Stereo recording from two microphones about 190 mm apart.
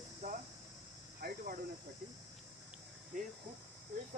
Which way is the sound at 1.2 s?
55° right (ahead or behind).